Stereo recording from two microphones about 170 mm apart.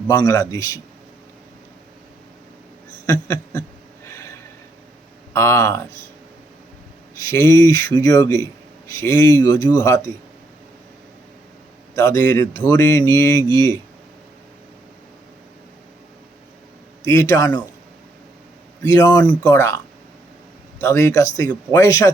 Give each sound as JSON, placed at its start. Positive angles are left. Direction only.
{"t": 0.1, "sound": "speech", "side_deg": 15}
{"t": 3.1, "sound": "speech", "side_deg": 15}
{"t": 5.3, "sound": "speech", "side_deg": 15}
{"t": 7.2, "sound": "speech", "side_deg": 20}
{"t": 11.9, "sound": "speech", "side_deg": 15}
{"t": 17.1, "sound": "speech", "side_deg": 15}
{"t": 18.8, "sound": "speech", "side_deg": 20}
{"t": 20.8, "sound": "speech", "side_deg": 15}